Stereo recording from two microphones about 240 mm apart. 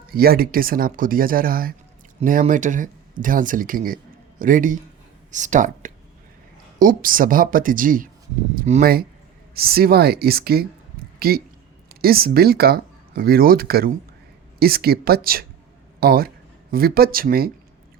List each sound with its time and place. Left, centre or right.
0.1 s a man's voice: right